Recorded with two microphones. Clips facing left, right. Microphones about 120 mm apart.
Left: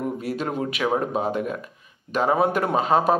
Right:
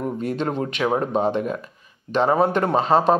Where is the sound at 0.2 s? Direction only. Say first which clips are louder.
Right 2 dB; 5° left (ahead or behind).